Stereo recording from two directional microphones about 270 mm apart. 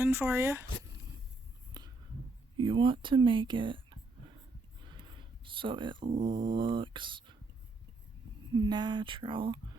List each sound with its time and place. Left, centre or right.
0.0 s speech: centre
1.7 s a sound: centre
2.6 s speech: centre
5.5 s speech: centre
8.5 s speech: centre